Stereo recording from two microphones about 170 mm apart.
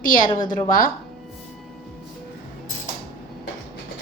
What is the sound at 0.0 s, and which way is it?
Speech, 55° left (ahead or behind).